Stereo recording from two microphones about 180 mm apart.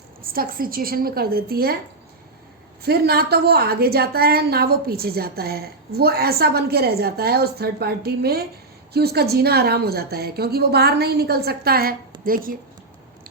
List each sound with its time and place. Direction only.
0.2 s a woman's voice: 55° right (ahead or behind)
2.8 s a woman's voice: 60° right (ahead or behind)